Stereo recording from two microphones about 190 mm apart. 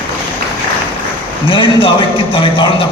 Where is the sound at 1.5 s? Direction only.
25° left (ahead or behind).